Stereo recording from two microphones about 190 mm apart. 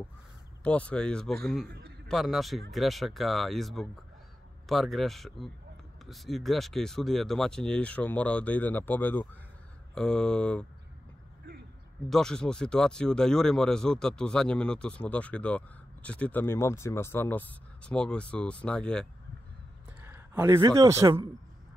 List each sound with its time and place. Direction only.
0.7 s speech: 5° left (ahead or behind)
1.7 s a man's voice: 60° right (ahead or behind)
2.0 s speech: centre (ahead or behind)
12.1 s speech: 5° left (ahead or behind)
20.0 s speech: 10° right (ahead or behind)